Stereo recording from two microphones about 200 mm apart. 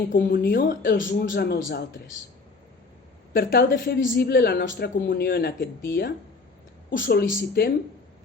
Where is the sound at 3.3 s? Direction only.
50° left (ahead or behind).